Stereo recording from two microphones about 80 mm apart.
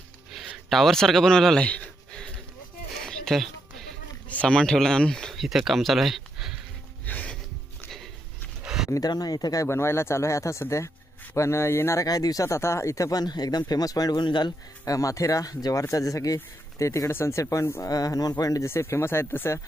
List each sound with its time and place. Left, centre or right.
0.5 s speech: centre
1.6 s a sound: centre
2.9 s music: centre
4.3 s speech: centre
7.0 s music: centre
8.6 s a sound: centre
9.0 s speech: left
9.6 s speech: left
12.0 s speech: left
14.3 s speech: left
14.8 s speech: left
18.7 s speech: left